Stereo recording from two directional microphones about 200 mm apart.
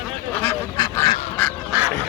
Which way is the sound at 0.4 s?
15° left (ahead or behind).